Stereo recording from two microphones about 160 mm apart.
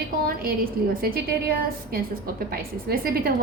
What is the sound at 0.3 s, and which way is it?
A woman's voice, 65° right (ahead or behind).